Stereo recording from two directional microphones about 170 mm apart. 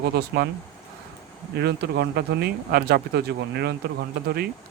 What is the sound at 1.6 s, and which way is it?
Speech, 75° right (ahead or behind).